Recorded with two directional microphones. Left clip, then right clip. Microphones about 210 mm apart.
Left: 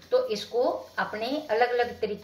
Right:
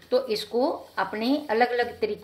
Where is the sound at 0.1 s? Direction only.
50° right (ahead or behind).